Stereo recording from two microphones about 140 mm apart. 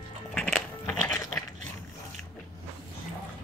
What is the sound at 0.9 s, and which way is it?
Coin, 20° left (ahead or behind).